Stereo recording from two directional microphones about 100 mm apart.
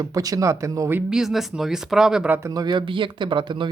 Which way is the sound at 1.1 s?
5° right (ahead or behind).